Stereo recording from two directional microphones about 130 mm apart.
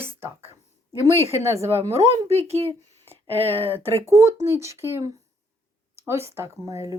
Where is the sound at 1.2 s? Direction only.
20° right (ahead or behind).